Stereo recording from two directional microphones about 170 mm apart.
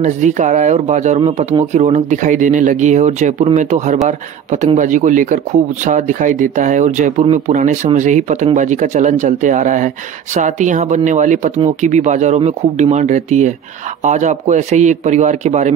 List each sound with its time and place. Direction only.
0.0 s a man's voice: 45° right (ahead or behind)